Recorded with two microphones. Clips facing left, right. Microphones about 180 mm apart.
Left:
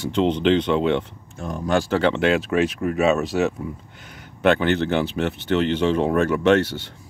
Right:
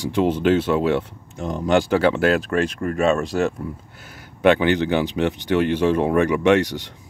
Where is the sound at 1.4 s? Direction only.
20° right (ahead or behind).